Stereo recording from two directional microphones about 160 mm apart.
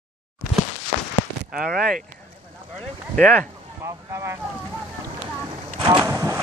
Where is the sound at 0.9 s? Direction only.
55° left (ahead or behind).